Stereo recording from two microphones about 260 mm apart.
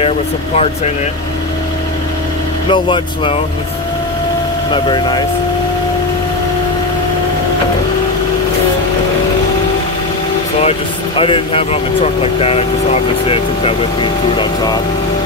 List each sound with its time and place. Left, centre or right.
2.7 s speech: centre
4.6 s speech: centre
10.6 s speech: left